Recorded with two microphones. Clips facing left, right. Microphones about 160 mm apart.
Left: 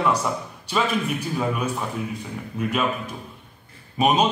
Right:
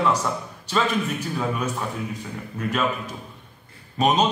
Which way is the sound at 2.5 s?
10° left (ahead or behind).